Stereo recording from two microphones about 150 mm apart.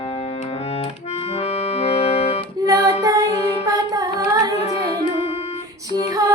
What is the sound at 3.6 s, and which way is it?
Carnatic music, 25° right (ahead or behind).